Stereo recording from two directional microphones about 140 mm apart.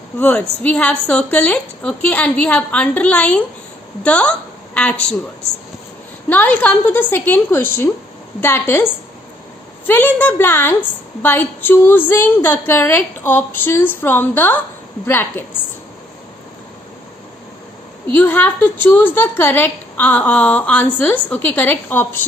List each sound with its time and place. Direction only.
0.2 s a woman's voice: 10° left (ahead or behind)
6.2 s a woman's voice: 10° left (ahead or behind)
18.1 s a woman's voice: 10° left (ahead or behind)